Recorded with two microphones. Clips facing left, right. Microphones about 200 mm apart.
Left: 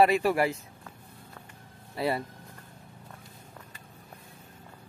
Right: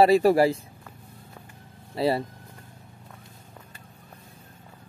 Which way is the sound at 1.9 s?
30° right (ahead or behind).